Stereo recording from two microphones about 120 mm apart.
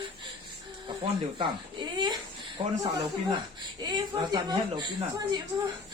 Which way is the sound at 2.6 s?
40° right (ahead or behind).